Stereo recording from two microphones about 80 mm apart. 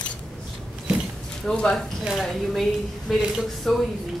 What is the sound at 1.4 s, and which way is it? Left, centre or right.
A woman's voice, centre.